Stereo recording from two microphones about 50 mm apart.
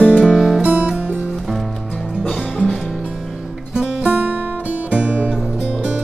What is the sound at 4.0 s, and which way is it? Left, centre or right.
Music, right.